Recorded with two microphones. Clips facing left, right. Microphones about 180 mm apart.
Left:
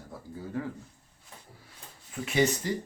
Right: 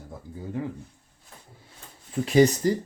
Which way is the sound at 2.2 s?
35° right (ahead or behind).